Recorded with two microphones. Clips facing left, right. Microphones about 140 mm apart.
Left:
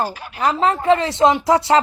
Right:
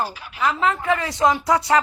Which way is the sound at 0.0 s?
50° left (ahead or behind).